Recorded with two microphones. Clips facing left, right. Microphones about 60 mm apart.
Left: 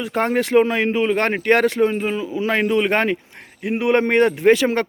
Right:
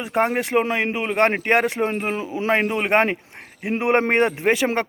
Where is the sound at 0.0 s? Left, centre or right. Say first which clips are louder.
Left 1 dB; centre.